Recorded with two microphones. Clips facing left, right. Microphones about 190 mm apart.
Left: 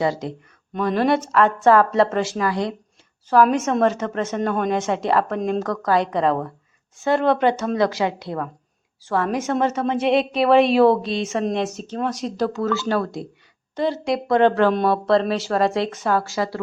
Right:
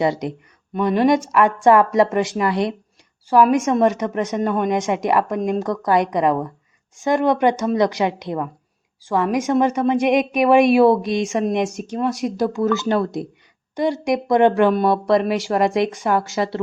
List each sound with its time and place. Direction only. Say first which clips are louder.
0.0 s a woman's voice: right 2 dB; 20° right (ahead or behind)